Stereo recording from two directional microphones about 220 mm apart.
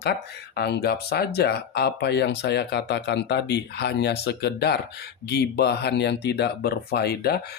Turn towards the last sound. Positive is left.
turn(degrees=45)  # may be behind; listen again after turning